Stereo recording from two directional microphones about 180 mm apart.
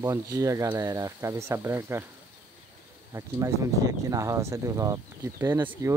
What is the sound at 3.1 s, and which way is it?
Speech, 15° right (ahead or behind).